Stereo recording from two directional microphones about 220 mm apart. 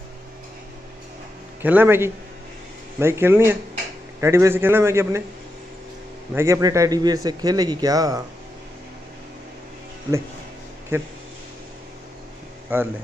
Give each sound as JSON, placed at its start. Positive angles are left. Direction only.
{"t": 1.6, "sound": "a man's voice", "side_deg": -10}
{"t": 6.3, "sound": "a man's voice", "side_deg": -15}
{"t": 10.9, "sound": "a man's voice", "side_deg": -10}
{"t": 12.7, "sound": "a man's voice", "side_deg": -10}